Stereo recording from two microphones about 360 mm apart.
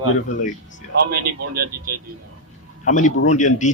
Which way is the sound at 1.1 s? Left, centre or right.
Right.